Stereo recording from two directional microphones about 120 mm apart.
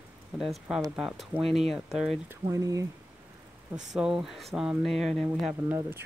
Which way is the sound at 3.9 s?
5° right (ahead or behind).